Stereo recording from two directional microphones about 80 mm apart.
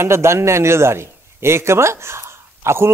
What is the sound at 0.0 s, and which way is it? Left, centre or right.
A man's voice, right.